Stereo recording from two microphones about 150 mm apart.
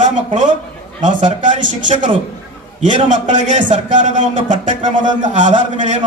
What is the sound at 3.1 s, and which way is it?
A man's voice, 55° right (ahead or behind).